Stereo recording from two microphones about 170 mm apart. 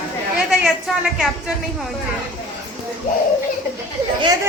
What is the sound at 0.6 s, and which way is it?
Speech, centre (ahead or behind).